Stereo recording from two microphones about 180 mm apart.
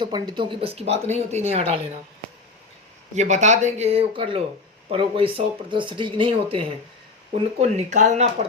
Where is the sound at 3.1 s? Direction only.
40° right (ahead or behind).